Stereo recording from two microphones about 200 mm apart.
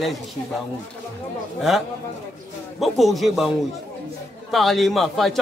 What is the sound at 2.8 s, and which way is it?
A man's voice, centre (ahead or behind).